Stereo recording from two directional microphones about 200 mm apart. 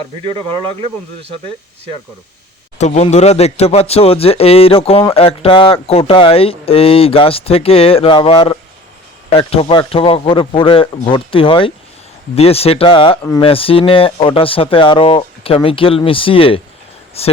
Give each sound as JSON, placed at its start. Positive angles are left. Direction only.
{"t": 2.7, "sound": "a man's voice", "side_deg": 35}